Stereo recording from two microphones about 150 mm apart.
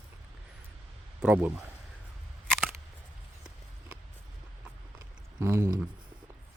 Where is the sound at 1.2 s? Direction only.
10° right (ahead or behind).